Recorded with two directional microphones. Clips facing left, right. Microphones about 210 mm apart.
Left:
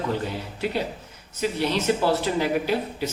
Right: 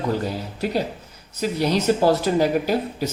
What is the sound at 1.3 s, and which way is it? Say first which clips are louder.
Speech: right 3 dB; 40° right (ahead or behind).